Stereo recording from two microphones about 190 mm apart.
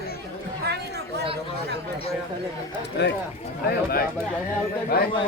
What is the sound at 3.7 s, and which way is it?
Speech, 55° left (ahead or behind).